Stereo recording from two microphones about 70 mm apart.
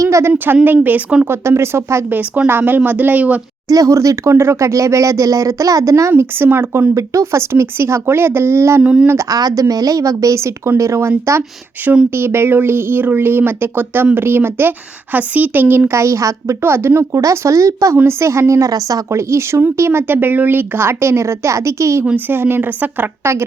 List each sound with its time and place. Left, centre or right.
0.0 s a sound: right
0.3 s speech: right
1.3 s speech: right
2.0 s speech: right
3.7 s speech: right
6.9 s speech: right
8.8 s speech: centre
9.3 s speech: right
11.8 s speech: right
12.1 s speech: right
15.9 s speech: right
17.1 s speech: right
17.9 s speech: right
19.1 s speech: right